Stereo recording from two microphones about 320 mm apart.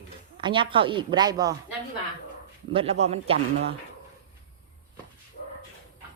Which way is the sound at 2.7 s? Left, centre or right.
Centre.